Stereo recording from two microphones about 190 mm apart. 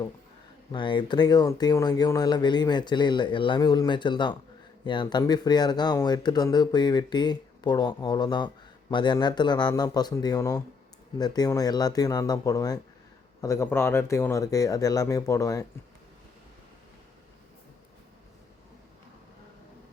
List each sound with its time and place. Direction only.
0.7 s speech: 25° left (ahead or behind)